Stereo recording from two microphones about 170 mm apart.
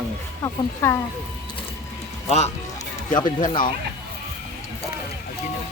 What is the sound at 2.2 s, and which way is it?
Speech, 40° left (ahead or behind).